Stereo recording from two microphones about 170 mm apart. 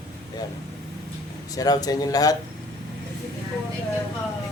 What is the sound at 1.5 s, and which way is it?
Speech, 20° left (ahead or behind).